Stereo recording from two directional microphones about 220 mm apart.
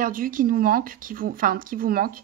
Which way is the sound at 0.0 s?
40° right (ahead or behind).